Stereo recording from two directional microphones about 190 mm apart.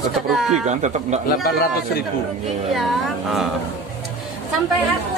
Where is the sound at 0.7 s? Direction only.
35° right (ahead or behind).